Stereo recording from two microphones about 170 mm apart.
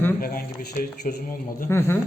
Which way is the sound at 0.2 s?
60° left (ahead or behind).